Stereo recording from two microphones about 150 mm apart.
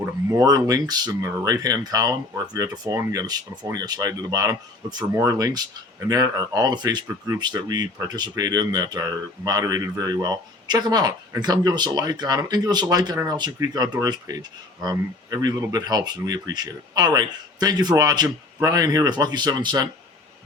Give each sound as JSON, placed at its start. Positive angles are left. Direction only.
{"t": 0.0, "sound": "speech", "side_deg": -25}